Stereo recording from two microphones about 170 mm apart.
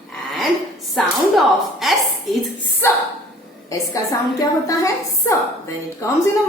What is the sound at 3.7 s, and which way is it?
A woman's voice, 20° left (ahead or behind).